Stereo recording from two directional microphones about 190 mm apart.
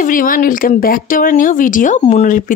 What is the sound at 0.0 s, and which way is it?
Speech, 45° left (ahead or behind).